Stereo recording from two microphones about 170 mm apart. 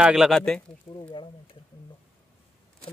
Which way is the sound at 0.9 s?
30° left (ahead or behind).